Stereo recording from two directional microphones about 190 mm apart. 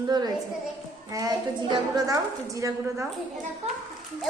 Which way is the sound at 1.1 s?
20° right (ahead or behind).